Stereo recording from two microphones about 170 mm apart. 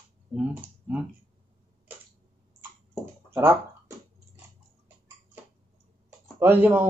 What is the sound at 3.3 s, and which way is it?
Speech, 15° right (ahead or behind).